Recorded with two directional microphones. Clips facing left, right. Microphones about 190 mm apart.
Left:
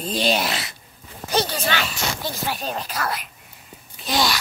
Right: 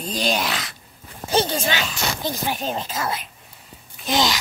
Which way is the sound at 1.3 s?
25° right (ahead or behind).